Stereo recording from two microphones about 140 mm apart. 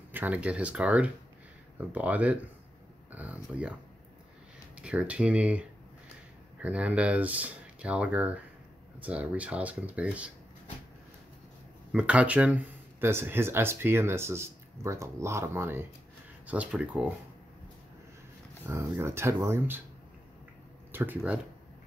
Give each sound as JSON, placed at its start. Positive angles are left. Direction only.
{"t": 0.1, "sound": "speech", "side_deg": -10}
{"t": 4.7, "sound": "speech", "side_deg": -10}
{"t": 11.9, "sound": "speech", "side_deg": -10}
{"t": 18.7, "sound": "speech", "side_deg": -20}
{"t": 20.9, "sound": "speech", "side_deg": -15}